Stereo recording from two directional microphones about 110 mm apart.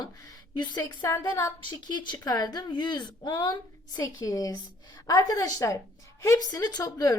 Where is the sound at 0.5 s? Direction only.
40° left (ahead or behind).